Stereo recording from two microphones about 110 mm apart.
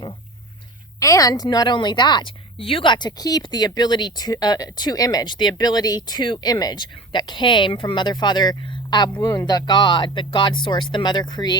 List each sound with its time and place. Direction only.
0.9 s a woman's voice: 30° left (ahead or behind)